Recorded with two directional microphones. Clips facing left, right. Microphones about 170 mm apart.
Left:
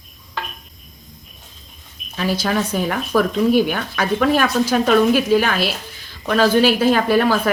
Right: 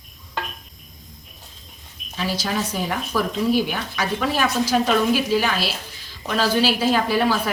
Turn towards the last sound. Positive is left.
turn(degrees=55)  # may be behind; listen again after turning